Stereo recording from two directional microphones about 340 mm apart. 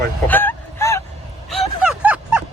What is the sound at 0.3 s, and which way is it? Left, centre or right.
Vehicle, centre.